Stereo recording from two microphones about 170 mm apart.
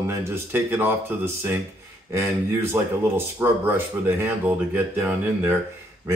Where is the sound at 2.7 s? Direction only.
15° right (ahead or behind).